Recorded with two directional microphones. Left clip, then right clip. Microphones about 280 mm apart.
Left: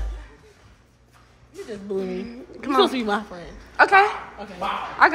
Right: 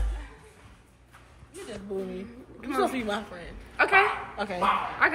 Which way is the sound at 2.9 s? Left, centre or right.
Left.